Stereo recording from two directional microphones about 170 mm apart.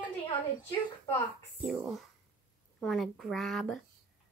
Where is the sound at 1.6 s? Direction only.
Centre (ahead or behind).